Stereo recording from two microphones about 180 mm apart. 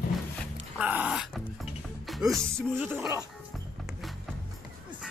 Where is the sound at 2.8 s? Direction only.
10° right (ahead or behind).